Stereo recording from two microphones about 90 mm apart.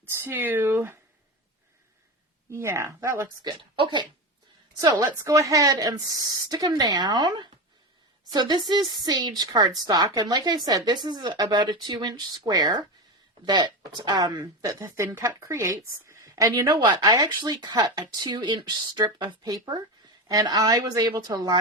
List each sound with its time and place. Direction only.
0.0 s speech: 25° right (ahead or behind)
2.5 s speech: 30° right (ahead or behind)
3.4 s a woman's voice: 65° right (ahead or behind)
4.8 s speech: 50° right (ahead or behind)
5.0 s speech: 35° right (ahead or behind); by 14.5 s 50° right (ahead or behind)
14.6 s a woman's voice: 30° right (ahead or behind)
16.6 s speech: 50° right (ahead or behind)